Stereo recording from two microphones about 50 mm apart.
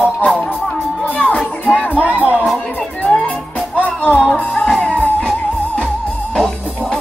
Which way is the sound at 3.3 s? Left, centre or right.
Left.